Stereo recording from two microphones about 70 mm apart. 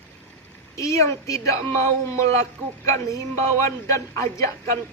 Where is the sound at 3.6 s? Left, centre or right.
Left.